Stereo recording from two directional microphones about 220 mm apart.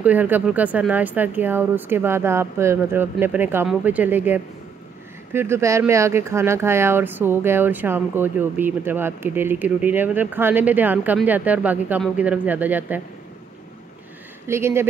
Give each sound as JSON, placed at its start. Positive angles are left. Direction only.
{"t": 0.0, "sound": "speech", "side_deg": -5}
{"t": 14.5, "sound": "speech", "side_deg": -10}